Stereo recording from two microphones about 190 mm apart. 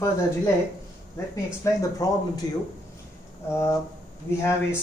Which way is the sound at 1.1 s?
15° left (ahead or behind).